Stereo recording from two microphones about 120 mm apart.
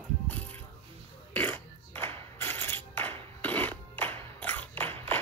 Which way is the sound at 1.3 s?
15° left (ahead or behind).